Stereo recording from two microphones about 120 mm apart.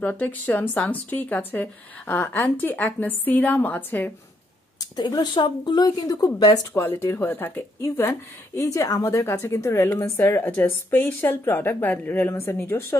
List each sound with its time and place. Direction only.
0.0 s speech: 15° left (ahead or behind)
4.9 s speech: 35° left (ahead or behind)
6.7 s speech: 15° left (ahead or behind)